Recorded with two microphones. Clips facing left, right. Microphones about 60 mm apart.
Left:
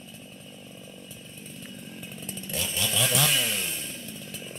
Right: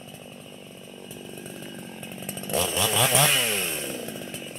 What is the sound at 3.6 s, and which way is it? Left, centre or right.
Chainsaw, right.